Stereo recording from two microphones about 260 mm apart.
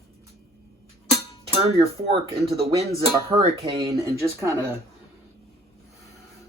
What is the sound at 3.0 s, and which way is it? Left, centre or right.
Speech, centre.